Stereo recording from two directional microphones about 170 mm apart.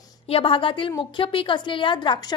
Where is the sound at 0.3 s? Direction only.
35° left (ahead or behind).